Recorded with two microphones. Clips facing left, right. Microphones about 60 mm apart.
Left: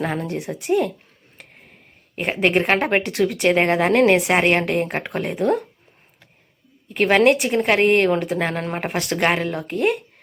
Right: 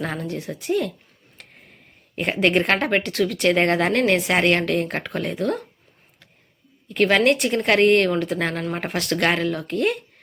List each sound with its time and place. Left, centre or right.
0.3 s a woman's voice: centre
2.1 s a woman's voice: centre
6.8 s a woman's voice: centre